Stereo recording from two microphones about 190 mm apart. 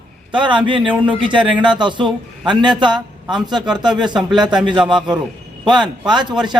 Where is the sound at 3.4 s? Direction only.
20° right (ahead or behind).